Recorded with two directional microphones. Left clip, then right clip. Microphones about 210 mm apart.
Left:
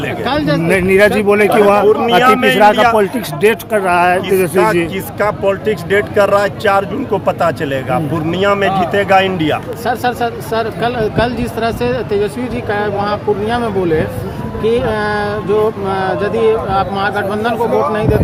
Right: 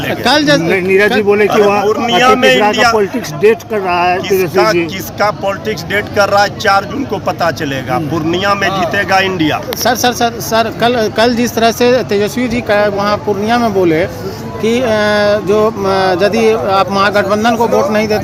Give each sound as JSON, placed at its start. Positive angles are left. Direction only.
{"t": 0.3, "sound": "speech", "side_deg": -40}
{"t": 0.7, "sound": "a man's voice", "side_deg": 5}
{"t": 9.8, "sound": "speech", "side_deg": -45}